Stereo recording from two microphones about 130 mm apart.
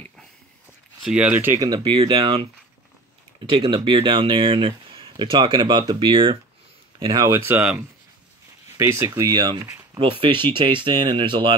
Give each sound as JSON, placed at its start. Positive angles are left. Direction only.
{"t": 1.0, "sound": "speech", "side_deg": -10}
{"t": 1.6, "sound": "speech", "side_deg": -30}
{"t": 2.0, "sound": "speech", "side_deg": -40}
{"t": 7.3, "sound": "speech", "side_deg": -15}
{"t": 8.7, "sound": "speech", "side_deg": -25}
{"t": 9.9, "sound": "speech", "side_deg": -45}